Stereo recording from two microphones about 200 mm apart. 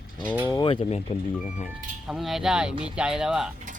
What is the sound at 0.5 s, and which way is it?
Speech, 25° left (ahead or behind).